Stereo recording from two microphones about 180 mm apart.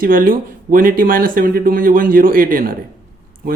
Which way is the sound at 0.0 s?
50° right (ahead or behind).